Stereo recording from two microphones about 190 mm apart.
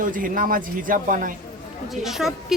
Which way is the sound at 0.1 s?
45° right (ahead or behind).